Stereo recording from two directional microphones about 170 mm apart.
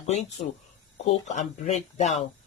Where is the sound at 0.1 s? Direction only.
40° left (ahead or behind).